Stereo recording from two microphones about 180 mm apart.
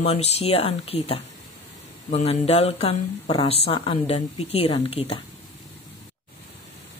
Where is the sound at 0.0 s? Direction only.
35° left (ahead or behind).